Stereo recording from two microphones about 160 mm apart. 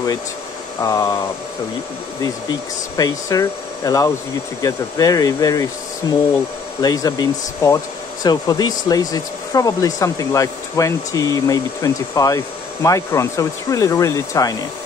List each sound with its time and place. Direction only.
0.8 s speech: 20° left (ahead or behind)
3.0 s speech: 25° left (ahead or behind)